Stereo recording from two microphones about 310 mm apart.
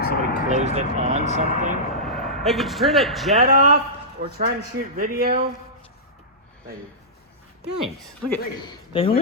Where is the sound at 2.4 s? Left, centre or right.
Centre.